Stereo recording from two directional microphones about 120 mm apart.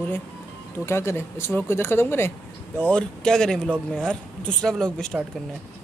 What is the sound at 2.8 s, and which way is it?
Speech, 10° left (ahead or behind).